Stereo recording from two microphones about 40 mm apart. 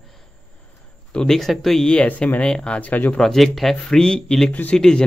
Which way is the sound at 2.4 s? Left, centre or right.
Left.